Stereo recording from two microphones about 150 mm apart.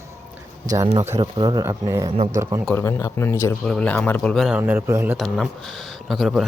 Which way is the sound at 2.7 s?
20° left (ahead or behind).